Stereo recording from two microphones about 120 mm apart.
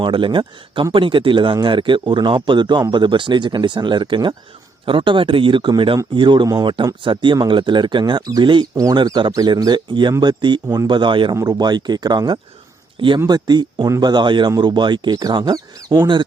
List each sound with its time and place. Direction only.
0.0 s speech: 45° right (ahead or behind)
8.7 s speech: 30° right (ahead or behind)
9.0 s speech: 40° right (ahead or behind)